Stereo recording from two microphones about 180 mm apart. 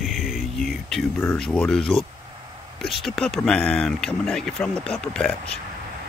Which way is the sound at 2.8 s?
Centre (ahead or behind).